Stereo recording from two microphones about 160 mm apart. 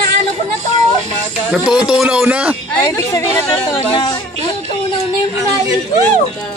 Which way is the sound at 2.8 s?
20° left (ahead or behind).